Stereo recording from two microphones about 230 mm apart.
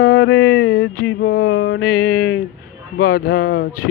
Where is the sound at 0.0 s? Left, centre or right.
Left.